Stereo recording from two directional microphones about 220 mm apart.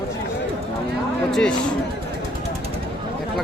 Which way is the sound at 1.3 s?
Centre (ahead or behind).